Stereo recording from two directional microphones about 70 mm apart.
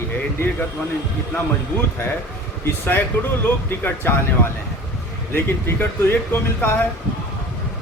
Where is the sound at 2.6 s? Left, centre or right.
Left.